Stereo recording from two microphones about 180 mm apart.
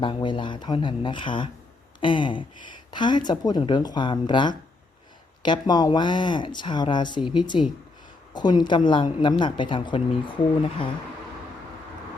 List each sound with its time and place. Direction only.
0.0 s a woman's voice: 25° left (ahead or behind)